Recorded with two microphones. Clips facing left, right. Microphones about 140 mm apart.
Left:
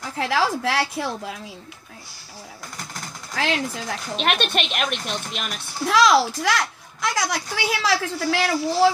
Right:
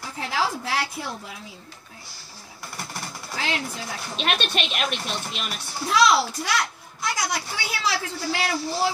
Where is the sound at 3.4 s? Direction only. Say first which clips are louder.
Left 5 dB; 90° left.